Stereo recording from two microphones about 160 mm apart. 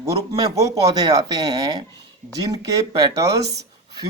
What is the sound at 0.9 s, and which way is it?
Speech, 25° right (ahead or behind).